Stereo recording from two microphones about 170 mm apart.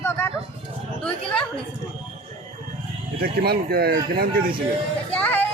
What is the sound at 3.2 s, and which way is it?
Speech, 65° right (ahead or behind).